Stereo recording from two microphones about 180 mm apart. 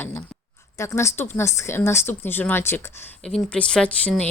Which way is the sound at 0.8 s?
15° left (ahead or behind).